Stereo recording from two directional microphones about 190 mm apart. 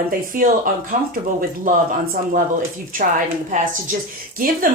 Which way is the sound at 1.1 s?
45° right (ahead or behind).